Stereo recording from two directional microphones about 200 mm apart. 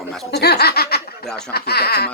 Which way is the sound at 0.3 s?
55° left (ahead or behind).